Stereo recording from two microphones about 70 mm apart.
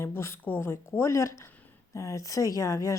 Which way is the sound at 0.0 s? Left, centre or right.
Left.